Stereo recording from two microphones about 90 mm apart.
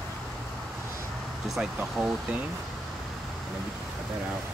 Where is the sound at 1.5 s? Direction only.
10° right (ahead or behind).